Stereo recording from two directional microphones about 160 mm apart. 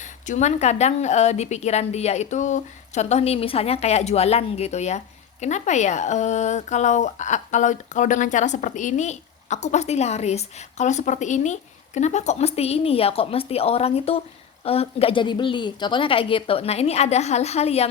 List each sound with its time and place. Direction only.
0.0 s a woman's voice: 50° left (ahead or behind)